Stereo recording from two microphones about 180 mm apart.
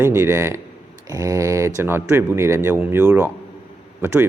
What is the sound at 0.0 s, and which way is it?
Speech, 15° right (ahead or behind).